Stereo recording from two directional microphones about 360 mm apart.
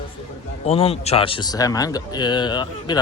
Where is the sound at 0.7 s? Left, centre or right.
Centre.